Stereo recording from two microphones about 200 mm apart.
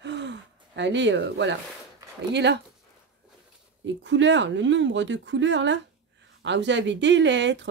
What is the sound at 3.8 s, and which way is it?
Speech, 65° right (ahead or behind).